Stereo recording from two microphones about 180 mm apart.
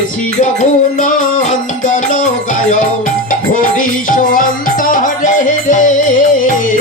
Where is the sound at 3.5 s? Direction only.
50° left (ahead or behind).